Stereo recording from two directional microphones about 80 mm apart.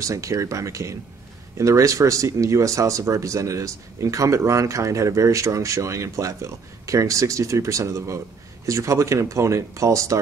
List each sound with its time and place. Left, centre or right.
0.0 s speech: right